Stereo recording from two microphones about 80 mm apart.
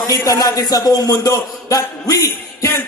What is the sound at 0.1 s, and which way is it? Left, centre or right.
A man's voice, left.